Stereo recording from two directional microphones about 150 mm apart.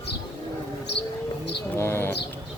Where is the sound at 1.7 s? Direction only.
15° left (ahead or behind).